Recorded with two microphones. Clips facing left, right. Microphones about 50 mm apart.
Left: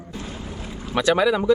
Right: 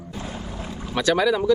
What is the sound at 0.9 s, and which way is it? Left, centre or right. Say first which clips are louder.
Speech: left 1 dB; centre.